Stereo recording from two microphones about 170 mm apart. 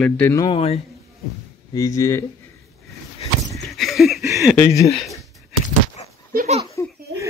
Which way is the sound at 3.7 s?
Centre (ahead or behind).